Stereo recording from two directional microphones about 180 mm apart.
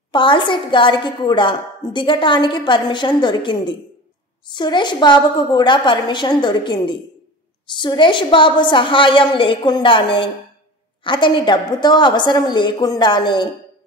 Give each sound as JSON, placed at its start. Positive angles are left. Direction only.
{"t": 0.1, "sound": "a woman's voice", "side_deg": 25}